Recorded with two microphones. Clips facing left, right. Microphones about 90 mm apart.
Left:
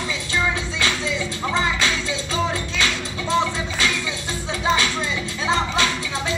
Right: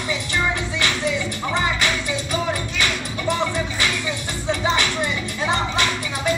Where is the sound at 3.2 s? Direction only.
20° left (ahead or behind).